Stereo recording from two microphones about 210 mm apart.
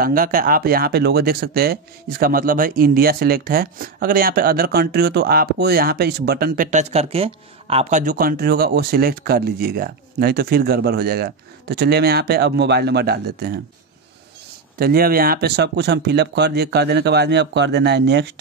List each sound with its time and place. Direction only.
0.0 s speech: 45° right (ahead or behind)
14.8 s speech: 45° right (ahead or behind)